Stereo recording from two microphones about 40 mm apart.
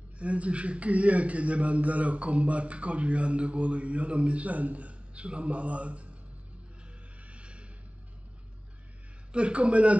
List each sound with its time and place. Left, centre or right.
0.2 s a man's voice: right
7.2 s music: right
9.3 s a man's voice: right